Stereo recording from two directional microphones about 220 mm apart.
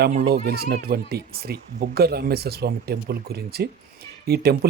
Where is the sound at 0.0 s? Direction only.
40° right (ahead or behind).